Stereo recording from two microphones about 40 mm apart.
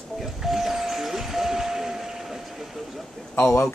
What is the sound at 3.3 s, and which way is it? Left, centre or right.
Speech, left.